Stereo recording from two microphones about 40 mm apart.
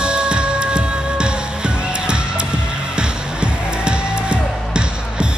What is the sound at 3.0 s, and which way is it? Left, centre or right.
Music, right.